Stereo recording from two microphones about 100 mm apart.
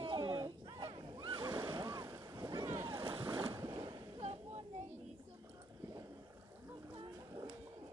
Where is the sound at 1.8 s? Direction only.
35° right (ahead or behind).